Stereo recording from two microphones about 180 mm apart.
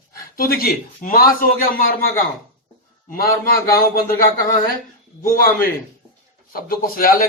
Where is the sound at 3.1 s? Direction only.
55° left (ahead or behind).